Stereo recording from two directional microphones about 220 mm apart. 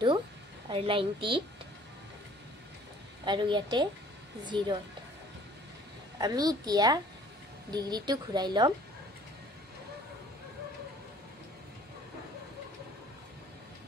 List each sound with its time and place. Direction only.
0.7 s a woman's voice: 25° right (ahead or behind)
3.3 s a woman's voice: 20° right (ahead or behind)
6.1 s a woman's voice: 15° right (ahead or behind)